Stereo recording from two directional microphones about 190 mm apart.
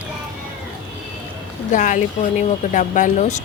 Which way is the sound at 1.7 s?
40° left (ahead or behind).